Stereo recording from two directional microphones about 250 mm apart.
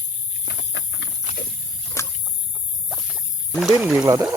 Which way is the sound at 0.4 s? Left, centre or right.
Left.